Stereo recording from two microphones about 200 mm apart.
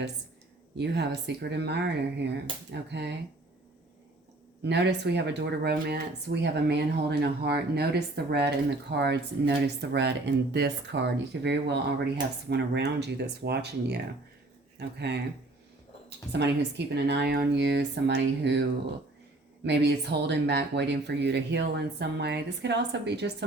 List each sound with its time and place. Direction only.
0.8 s speech: 60° right (ahead or behind)
4.6 s speech: 55° right (ahead or behind)
19.6 s speech: 55° right (ahead or behind)